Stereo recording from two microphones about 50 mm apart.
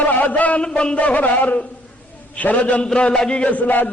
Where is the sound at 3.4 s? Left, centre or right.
Left.